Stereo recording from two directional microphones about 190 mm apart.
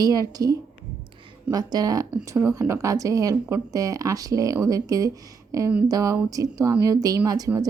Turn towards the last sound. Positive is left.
turn(degrees=-20)  # may be behind; listen again after turning